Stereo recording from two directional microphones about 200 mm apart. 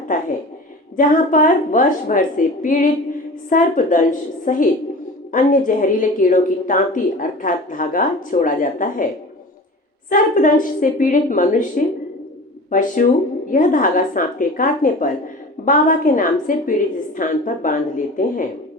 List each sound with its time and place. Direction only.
0.9 s a woman's voice: 40° left (ahead or behind)
10.1 s a woman's voice: 40° left (ahead or behind)